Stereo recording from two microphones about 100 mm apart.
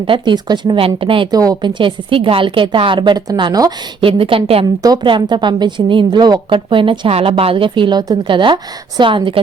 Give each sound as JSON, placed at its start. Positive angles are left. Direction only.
{"t": 0.1, "sound": "a woman's voice", "side_deg": -50}
{"t": 1.3, "sound": "a woman's voice", "side_deg": -40}
{"t": 1.8, "sound": "a woman's voice", "side_deg": -60}
{"t": 4.0, "sound": "a woman's voice", "side_deg": -65}
{"t": 5.0, "sound": "a woman's voice", "side_deg": -50}
{"t": 7.1, "sound": "a woman's voice", "side_deg": -75}